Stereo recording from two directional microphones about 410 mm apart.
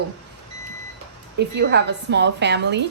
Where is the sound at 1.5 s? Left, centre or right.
Right.